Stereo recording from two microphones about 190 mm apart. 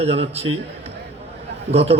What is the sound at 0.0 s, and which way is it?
A man's voice, 35° right (ahead or behind).